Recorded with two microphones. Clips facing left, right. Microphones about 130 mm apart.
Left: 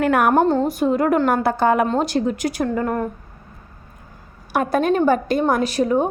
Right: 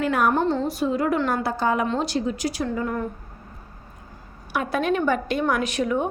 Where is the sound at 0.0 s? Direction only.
60° left (ahead or behind).